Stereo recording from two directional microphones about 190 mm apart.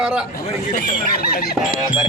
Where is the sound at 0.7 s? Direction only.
45° left (ahead or behind).